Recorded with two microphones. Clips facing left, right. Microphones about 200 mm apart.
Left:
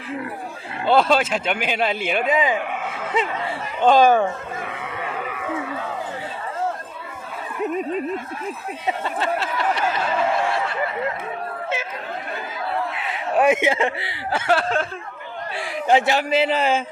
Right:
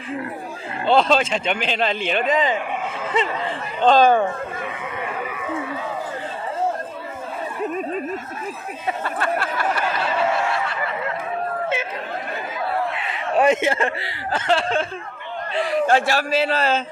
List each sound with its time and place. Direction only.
0.9 s speech: 5° left (ahead or behind)
3.8 s speech: 10° left (ahead or behind)
8.9 s a sound: 25° left (ahead or behind)
13.1 s a sound: 5° left (ahead or behind)
13.6 s speech: 15° left (ahead or behind)
15.5 s speech: 15° left (ahead or behind)